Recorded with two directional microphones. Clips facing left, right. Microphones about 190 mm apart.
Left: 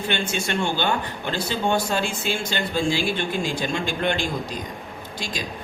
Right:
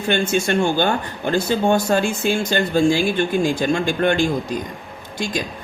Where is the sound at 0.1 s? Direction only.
45° right (ahead or behind).